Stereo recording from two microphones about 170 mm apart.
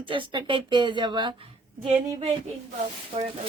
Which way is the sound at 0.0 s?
30° right (ahead or behind).